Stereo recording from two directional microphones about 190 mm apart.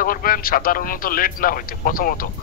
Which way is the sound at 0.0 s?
50° left (ahead or behind).